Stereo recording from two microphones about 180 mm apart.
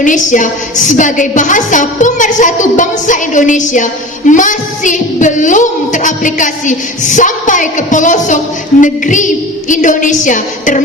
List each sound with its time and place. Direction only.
0.0 s a woman's voice: 45° left (ahead or behind)